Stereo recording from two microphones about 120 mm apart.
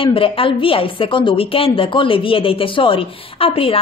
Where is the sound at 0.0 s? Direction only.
45° left (ahead or behind).